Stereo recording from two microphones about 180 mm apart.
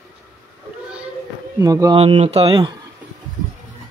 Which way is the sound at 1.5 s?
20° right (ahead or behind).